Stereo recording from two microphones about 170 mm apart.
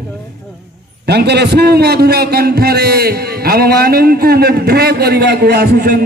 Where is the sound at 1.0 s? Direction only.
80° right.